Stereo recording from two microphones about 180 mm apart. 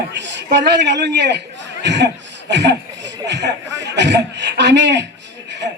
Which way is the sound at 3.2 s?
70° right (ahead or behind).